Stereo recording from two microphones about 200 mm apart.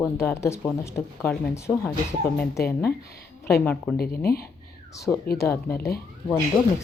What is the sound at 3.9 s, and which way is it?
Speech, 50° left (ahead or behind).